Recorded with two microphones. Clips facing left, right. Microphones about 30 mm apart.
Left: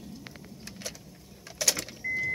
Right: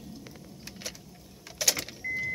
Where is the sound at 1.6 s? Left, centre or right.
Centre.